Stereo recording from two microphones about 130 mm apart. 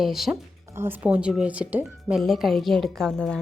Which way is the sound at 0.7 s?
15° right (ahead or behind).